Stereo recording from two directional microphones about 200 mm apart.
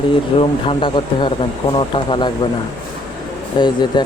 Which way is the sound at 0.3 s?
25° left (ahead or behind).